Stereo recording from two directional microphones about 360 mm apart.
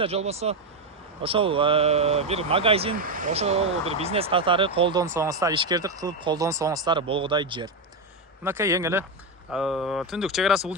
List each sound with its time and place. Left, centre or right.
0.0 s speech: centre